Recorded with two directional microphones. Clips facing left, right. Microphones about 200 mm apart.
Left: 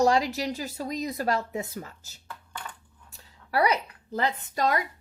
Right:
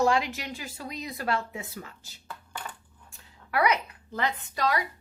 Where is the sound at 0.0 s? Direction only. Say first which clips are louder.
Left 2 dB; 40° left (ahead or behind).